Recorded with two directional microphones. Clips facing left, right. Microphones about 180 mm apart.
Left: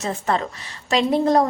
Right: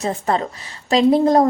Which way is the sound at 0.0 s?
35° right (ahead or behind).